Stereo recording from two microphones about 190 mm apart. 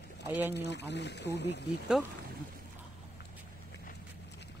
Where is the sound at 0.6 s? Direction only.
65° left (ahead or behind).